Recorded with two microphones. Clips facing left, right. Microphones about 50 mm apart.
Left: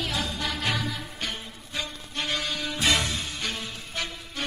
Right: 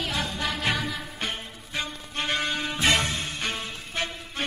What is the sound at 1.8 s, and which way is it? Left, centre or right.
Music, right.